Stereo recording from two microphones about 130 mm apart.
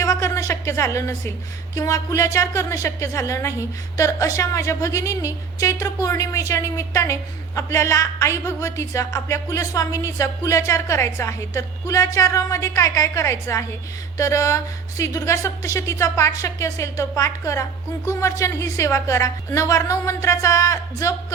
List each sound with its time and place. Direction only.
0.0 s a woman's voice: 25° left (ahead or behind)